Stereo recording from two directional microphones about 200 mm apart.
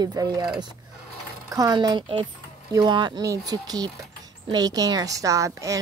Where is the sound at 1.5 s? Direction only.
20° right (ahead or behind).